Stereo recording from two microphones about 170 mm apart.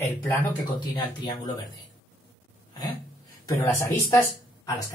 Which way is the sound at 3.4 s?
20° left (ahead or behind).